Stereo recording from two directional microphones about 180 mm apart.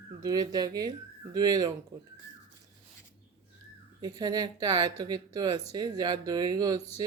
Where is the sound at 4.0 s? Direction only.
20° right (ahead or behind).